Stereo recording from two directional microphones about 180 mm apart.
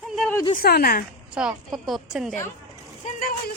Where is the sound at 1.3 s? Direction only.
5° right (ahead or behind).